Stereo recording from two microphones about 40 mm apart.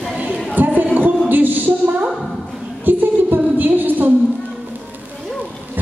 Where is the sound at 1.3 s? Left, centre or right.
Right.